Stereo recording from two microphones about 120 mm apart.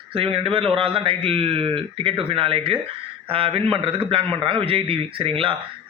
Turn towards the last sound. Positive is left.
turn(degrees=-50)  # may be behind; listen again after turning